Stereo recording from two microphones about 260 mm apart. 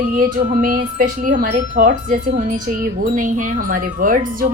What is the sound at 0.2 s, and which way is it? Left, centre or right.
Speech, right.